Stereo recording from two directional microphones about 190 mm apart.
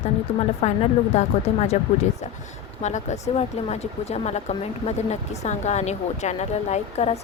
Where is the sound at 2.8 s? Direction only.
40° left (ahead or behind).